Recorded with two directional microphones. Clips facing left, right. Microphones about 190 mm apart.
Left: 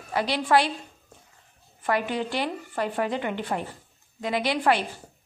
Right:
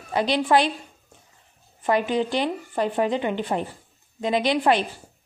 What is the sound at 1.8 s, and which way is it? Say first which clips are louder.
A woman's voice: right 4 dB; 20° right (ahead or behind).